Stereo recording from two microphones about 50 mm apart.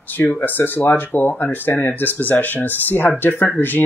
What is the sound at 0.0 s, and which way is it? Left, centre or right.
Speech, left.